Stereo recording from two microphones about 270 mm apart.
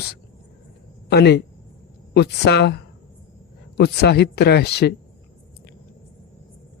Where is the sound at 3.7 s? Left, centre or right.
Left.